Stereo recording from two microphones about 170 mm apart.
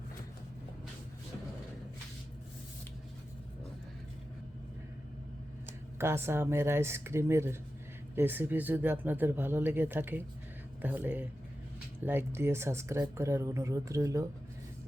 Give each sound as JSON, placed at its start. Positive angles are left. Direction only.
{"t": 6.0, "sound": "speech", "side_deg": -15}